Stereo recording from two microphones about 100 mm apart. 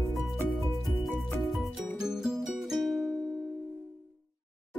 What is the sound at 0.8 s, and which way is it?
Music, centre (ahead or behind).